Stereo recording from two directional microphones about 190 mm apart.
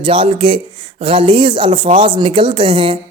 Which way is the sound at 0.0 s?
30° right (ahead or behind).